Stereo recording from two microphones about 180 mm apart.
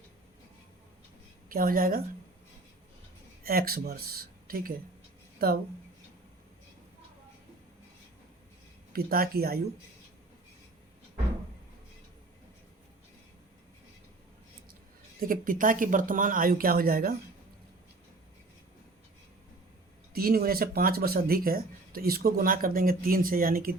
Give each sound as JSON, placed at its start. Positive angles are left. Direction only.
{"t": 1.5, "sound": "speech", "side_deg": -55}
{"t": 3.4, "sound": "speech", "side_deg": -55}
{"t": 8.9, "sound": "speech", "side_deg": -55}
{"t": 15.2, "sound": "speech", "side_deg": -50}
{"t": 20.1, "sound": "speech", "side_deg": -55}